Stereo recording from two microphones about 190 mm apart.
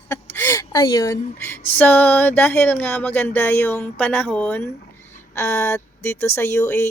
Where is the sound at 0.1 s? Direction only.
10° left (ahead or behind).